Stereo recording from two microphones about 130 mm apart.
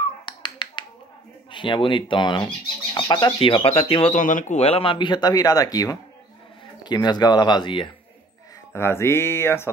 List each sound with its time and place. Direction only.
0.2 s finger snapping: 35° left (ahead or behind)
1.5 s speech: 40° left (ahead or behind)
4.1 s speech: 80° left
4.6 s speech: 50° left (ahead or behind)
8.7 s mantra: 20° left (ahead or behind)